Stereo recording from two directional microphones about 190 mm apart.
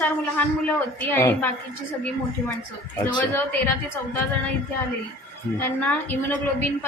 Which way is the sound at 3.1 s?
10° left (ahead or behind).